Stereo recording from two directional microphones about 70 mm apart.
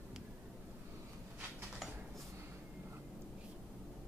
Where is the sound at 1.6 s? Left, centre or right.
Centre.